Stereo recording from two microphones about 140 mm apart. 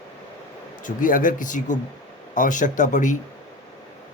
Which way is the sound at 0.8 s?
75° left (ahead or behind).